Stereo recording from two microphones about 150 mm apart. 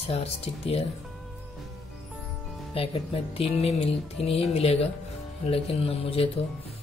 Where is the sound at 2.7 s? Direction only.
40° left (ahead or behind).